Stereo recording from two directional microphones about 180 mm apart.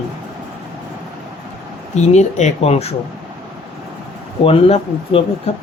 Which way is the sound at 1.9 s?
40° left (ahead or behind).